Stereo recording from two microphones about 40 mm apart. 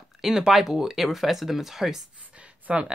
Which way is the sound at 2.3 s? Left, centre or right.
Right.